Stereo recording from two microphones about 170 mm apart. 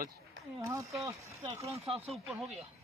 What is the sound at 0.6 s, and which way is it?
Speech, 20° right (ahead or behind).